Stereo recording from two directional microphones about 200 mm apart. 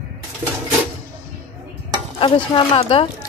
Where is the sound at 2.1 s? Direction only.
25° left (ahead or behind).